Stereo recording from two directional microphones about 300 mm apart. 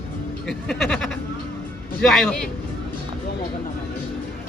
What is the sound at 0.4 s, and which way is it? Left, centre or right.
Speech, centre.